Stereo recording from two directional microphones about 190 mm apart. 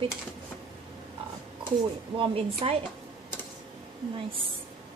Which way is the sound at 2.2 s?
30° right (ahead or behind).